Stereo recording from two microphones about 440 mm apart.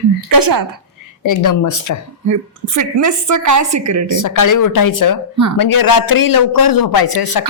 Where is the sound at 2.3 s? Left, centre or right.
Right.